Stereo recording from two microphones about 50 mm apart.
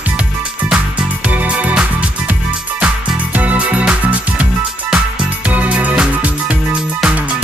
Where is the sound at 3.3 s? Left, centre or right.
Right.